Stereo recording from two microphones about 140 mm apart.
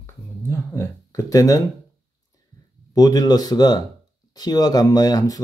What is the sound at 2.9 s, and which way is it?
Speech, 25° left (ahead or behind).